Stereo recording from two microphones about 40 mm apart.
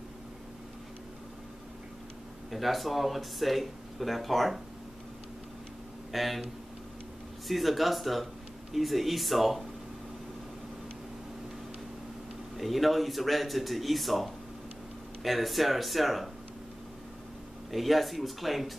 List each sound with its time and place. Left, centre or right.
2.5 s speech: centre
6.1 s speech: centre
7.4 s speech: centre
12.5 s speech: centre
17.6 s speech: centre